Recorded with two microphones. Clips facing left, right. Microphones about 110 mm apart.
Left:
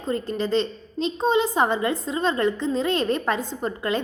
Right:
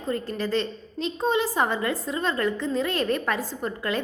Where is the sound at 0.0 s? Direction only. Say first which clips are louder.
Left 2 dB; 20° left (ahead or behind).